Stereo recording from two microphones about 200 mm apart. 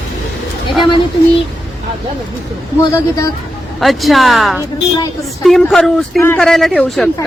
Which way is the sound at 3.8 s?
Centre (ahead or behind).